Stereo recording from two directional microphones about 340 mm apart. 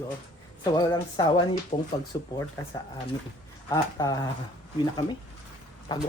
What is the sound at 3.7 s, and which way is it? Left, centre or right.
Speech, centre.